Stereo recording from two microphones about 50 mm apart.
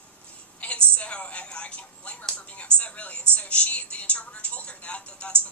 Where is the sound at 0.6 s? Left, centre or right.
Left.